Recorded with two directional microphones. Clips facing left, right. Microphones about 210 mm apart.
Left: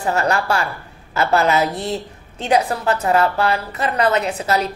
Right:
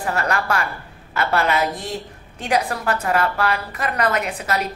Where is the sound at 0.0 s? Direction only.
25° left (ahead or behind).